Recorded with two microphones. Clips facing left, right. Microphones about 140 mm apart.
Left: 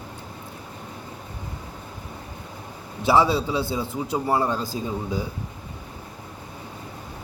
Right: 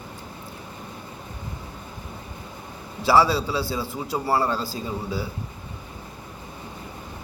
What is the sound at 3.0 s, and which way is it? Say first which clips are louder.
A man's voice: even; 20° left (ahead or behind).